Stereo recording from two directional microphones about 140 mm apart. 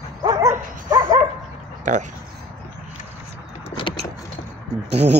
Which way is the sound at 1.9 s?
70° right (ahead or behind).